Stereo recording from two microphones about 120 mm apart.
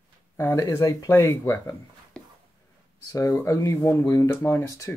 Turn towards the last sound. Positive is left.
turn(degrees=25)  # may be behind; listen again after turning